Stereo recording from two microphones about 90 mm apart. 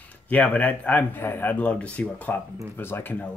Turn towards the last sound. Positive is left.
turn(degrees=20)  # may be behind; listen again after turning